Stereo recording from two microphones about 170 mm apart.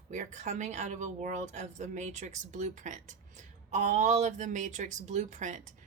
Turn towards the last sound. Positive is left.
turn(degrees=-45)  # may be behind; listen again after turning